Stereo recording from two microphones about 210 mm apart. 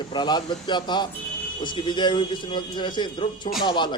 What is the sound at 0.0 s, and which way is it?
Speech, 20° left (ahead or behind).